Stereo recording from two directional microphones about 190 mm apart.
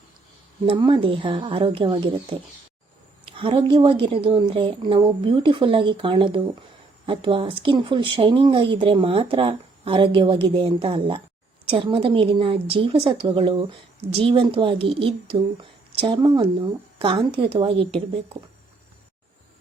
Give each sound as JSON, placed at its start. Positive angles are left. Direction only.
{"t": 0.6, "sound": "speech", "side_deg": -25}